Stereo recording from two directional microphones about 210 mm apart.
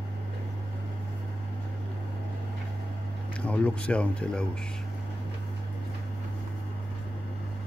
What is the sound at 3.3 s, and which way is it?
Speech, 5° left (ahead or behind).